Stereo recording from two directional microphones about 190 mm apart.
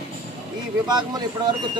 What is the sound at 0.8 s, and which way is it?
Speech, 20° right (ahead or behind).